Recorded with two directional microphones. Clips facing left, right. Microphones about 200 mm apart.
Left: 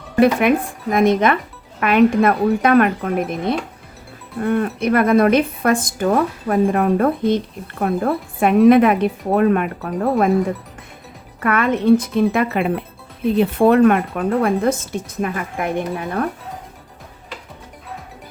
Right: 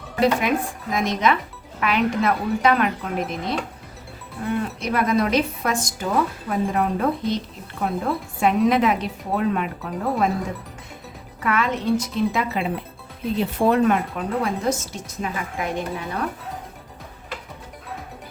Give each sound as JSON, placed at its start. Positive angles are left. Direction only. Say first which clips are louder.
{"t": 0.2, "sound": "speech", "louder": "left 6 dB", "side_deg": 60}
{"t": 11.3, "sound": "speech", "louder": "left 5 dB", "side_deg": 55}